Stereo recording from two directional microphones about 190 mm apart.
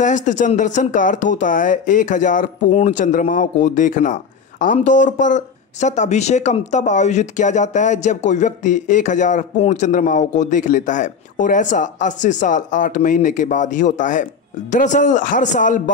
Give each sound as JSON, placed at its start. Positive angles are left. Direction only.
{"t": 0.0, "sound": "a man's voice", "side_deg": 40}